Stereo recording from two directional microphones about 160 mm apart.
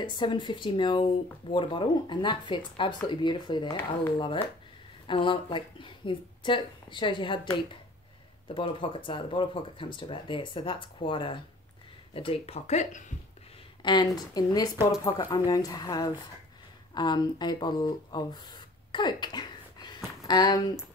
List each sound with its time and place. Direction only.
0.0 s speech: 30° left (ahead or behind)
5.0 s speech: 30° left (ahead or behind); by 13.1 s 45° left (ahead or behind)
13.8 s speech: 25° left (ahead or behind)